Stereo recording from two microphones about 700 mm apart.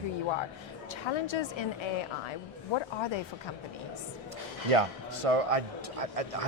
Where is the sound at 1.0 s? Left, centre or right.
Left.